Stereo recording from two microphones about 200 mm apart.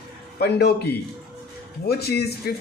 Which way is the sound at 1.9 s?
50° left (ahead or behind).